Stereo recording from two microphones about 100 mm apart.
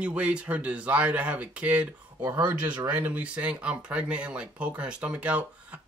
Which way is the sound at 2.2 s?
25° right (ahead or behind).